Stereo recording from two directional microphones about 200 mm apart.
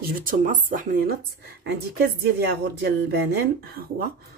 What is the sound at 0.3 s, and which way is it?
Speech, 40° right (ahead or behind).